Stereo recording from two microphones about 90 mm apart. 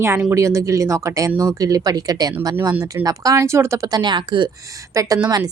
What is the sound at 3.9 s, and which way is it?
Speech, 50° right (ahead or behind).